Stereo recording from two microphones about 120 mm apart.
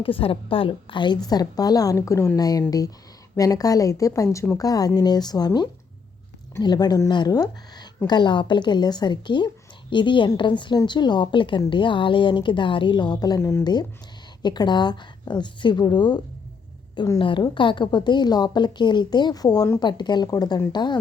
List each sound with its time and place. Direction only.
0.0 s a woman's voice: 50° left (ahead or behind)